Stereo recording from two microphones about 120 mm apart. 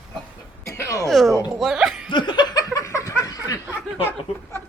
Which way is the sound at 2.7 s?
30° left (ahead or behind).